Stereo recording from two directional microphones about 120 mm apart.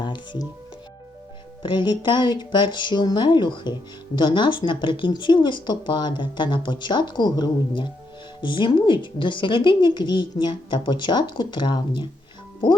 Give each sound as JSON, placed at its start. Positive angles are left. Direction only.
{"t": 0.0, "sound": "music", "side_deg": 40}
{"t": 1.6, "sound": "speech", "side_deg": 40}